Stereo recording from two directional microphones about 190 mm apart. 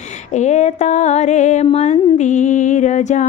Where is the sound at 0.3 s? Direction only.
40° left (ahead or behind).